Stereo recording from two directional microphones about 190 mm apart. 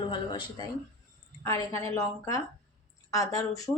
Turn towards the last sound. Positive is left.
turn(degrees=15)  # may be behind; listen again after turning